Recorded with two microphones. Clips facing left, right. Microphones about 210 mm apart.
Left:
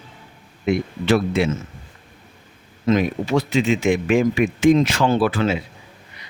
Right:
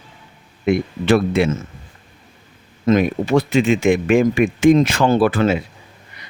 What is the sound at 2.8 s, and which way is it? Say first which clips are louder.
Speech: right 3 dB; 50° right (ahead or behind).